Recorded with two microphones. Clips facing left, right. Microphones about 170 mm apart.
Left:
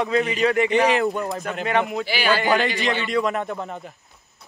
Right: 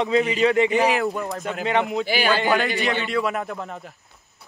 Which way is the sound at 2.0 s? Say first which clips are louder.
Right 2 dB; 45° right (ahead or behind).